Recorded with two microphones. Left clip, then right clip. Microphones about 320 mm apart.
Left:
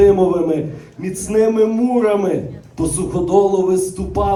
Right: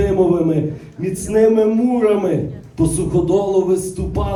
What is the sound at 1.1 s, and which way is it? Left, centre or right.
A man's voice, centre.